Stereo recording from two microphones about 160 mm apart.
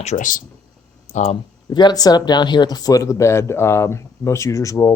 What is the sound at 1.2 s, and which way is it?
Speech, 30° left (ahead or behind).